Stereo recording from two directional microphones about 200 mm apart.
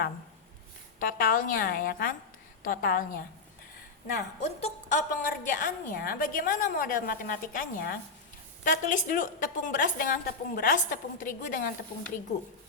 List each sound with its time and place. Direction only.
0.9 s a woman's voice: 45° left (ahead or behind)
4.6 s a woman's voice: 40° left (ahead or behind)